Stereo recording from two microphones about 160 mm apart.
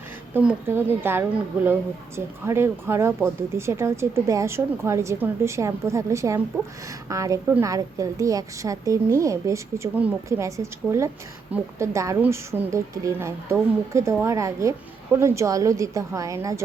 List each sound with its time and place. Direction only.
0.3 s a woman's voice: 10° right (ahead or behind)